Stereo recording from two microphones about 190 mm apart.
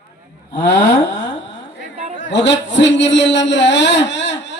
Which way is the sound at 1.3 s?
70° left (ahead or behind).